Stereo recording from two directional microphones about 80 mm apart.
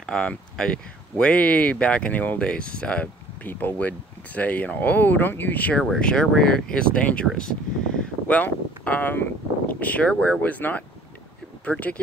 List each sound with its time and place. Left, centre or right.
0.0 s speech: centre
8.4 s speech: left